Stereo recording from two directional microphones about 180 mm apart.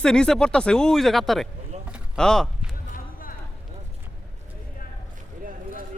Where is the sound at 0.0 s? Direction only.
5° left (ahead or behind).